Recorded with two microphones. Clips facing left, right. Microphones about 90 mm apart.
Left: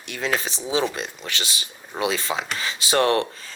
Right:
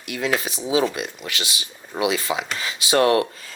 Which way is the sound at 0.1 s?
35° left (ahead or behind).